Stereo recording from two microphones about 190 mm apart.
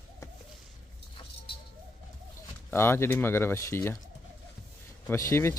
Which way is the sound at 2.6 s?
10° left (ahead or behind).